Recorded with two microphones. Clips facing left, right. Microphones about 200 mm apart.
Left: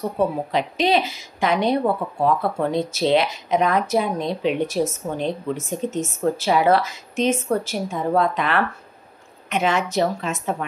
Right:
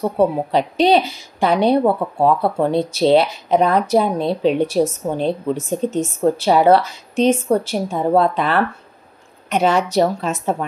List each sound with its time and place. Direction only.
0.2 s a woman's voice: 35° right (ahead or behind)